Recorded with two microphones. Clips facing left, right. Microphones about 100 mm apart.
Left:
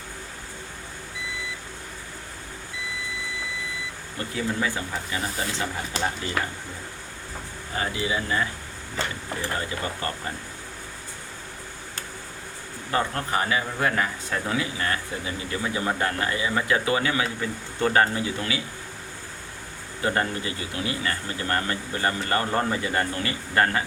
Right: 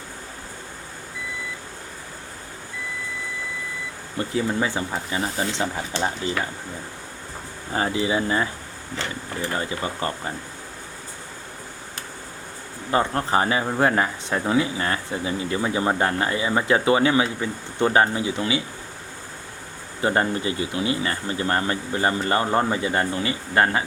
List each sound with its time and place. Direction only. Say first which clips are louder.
4.2 s speech: right 4 dB; 25° right (ahead or behind)
7.7 s speech: right 5 dB; 30° right (ahead or behind)
9.6 s speech: right 3 dB; 25° right (ahead or behind)
12.9 s speech: right 4 dB; 25° right (ahead or behind)
20.0 s speech: right 4 dB; 25° right (ahead or behind)